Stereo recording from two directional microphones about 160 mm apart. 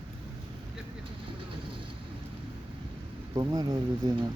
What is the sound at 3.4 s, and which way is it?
Speech, 25° right (ahead or behind).